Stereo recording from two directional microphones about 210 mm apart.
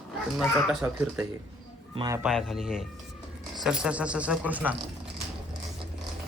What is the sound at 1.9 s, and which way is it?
Speech, 15° right (ahead or behind).